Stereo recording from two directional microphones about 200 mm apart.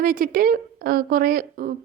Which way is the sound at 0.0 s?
45° right (ahead or behind).